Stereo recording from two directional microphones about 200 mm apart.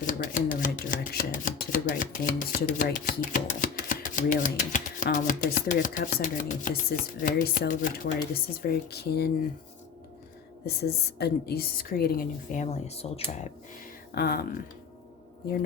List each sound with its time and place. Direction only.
0.0 s a woman's voice: 40° left (ahead or behind)
10.7 s a woman's voice: 55° left (ahead or behind); by 13.5 s 30° left (ahead or behind)
14.1 s a woman's voice: 50° left (ahead or behind)